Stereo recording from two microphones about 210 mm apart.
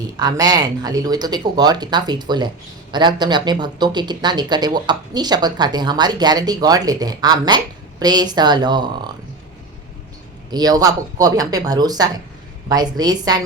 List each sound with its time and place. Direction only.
0.2 s speech: 20° right (ahead or behind)
10.5 s speech: 20° right (ahead or behind)